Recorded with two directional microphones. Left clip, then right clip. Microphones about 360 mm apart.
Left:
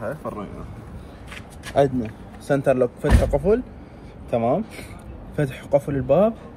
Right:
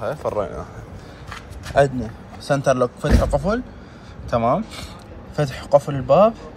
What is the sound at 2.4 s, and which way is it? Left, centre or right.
Speech, right.